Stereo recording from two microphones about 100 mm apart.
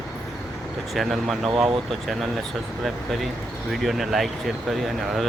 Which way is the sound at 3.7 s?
Centre (ahead or behind).